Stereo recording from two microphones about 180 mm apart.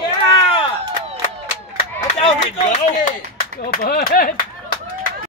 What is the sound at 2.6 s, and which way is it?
Speech, 45° left (ahead or behind).